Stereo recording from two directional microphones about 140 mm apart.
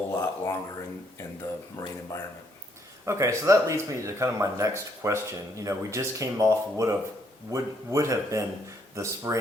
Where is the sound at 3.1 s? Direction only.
20° right (ahead or behind).